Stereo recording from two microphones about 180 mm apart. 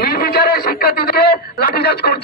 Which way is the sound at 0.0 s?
60° left (ahead or behind).